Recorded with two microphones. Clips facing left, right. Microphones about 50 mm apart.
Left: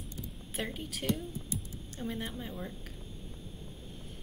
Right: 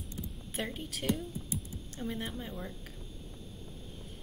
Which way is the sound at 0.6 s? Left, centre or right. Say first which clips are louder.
Even; centre.